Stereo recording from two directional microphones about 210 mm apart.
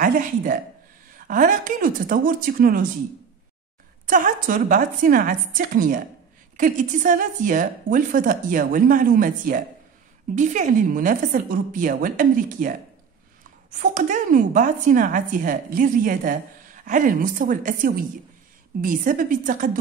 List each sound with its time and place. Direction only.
0.0 s a woman's voice: 40° right (ahead or behind)
4.0 s a woman's voice: 40° right (ahead or behind)